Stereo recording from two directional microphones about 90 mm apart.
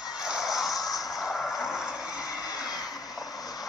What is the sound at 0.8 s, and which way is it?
Music, 45° left (ahead or behind).